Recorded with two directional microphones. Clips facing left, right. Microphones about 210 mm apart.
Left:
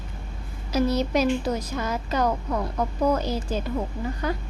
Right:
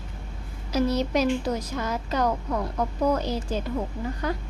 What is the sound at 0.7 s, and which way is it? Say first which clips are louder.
A woman's voice: left 1 dB; 5° left (ahead or behind).